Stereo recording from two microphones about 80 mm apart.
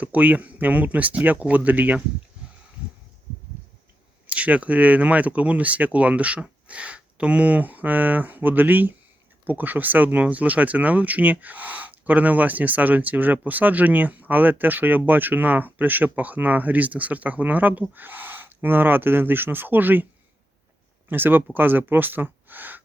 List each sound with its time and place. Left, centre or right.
0.0 s speech: centre
4.3 s speech: centre
21.1 s speech: right